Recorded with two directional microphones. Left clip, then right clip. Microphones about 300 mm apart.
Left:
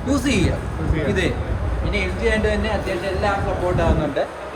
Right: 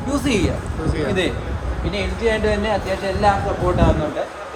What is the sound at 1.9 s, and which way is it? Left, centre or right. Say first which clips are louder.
Speech: right 1 dB; right.